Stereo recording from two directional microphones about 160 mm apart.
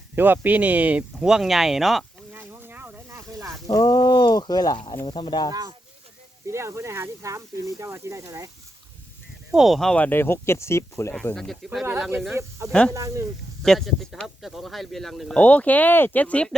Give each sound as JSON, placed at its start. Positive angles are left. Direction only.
{"t": 0.2, "sound": "speech", "side_deg": -10}
{"t": 2.3, "sound": "boat", "side_deg": -10}
{"t": 3.7, "sound": "speech", "side_deg": 25}
{"t": 5.5, "sound": "speech", "side_deg": -25}
{"t": 9.5, "sound": "speech", "side_deg": 0}
{"t": 11.1, "sound": "speech", "side_deg": 5}
{"t": 11.9, "sound": "speech", "side_deg": -10}
{"t": 12.3, "sound": "speech", "side_deg": -15}
{"t": 13.6, "sound": "speech", "side_deg": 0}